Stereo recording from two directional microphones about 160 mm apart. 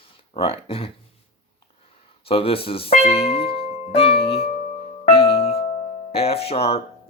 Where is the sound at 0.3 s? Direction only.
35° left (ahead or behind).